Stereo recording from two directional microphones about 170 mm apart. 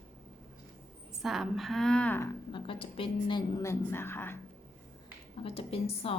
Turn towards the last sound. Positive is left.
turn(degrees=35)  # may be behind; listen again after turning